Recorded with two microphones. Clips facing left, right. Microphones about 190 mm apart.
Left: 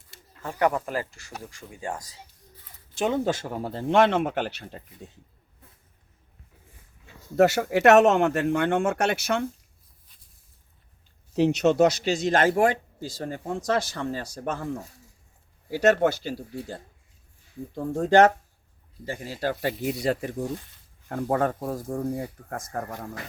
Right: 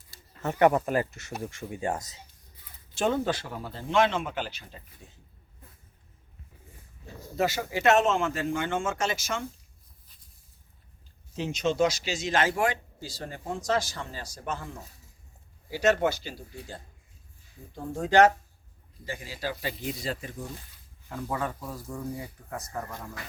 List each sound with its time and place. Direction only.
0.4 s speech: 20° right (ahead or behind)
3.2 s speech: 45° left (ahead or behind); by 5.2 s 60° left (ahead or behind)
7.3 s speech: 70° left (ahead or behind)
11.3 s speech: 65° left (ahead or behind)
15.7 s speech: 50° left (ahead or behind)
17.7 s speech: 55° left (ahead or behind)